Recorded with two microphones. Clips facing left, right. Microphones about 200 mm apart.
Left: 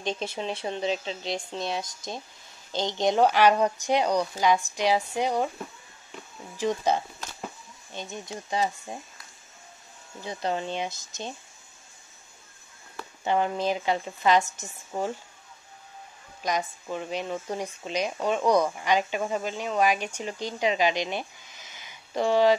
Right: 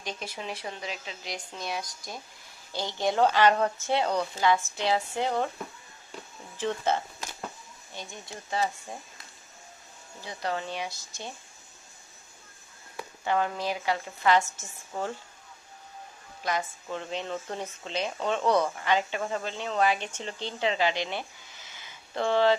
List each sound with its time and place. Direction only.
0.0 s speech: 25° left (ahead or behind)
6.6 s speech: 15° left (ahead or behind)
10.2 s speech: 20° left (ahead or behind)
13.2 s speech: 20° left (ahead or behind)
16.4 s speech: 15° left (ahead or behind)